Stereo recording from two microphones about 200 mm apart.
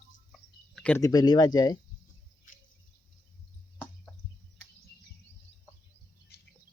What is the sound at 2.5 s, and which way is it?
Bird, 40° left (ahead or behind).